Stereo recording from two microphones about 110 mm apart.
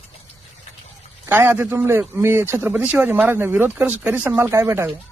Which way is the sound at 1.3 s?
20° right (ahead or behind).